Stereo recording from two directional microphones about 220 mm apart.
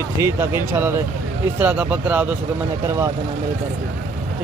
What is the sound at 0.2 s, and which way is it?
Speech, 10° right (ahead or behind).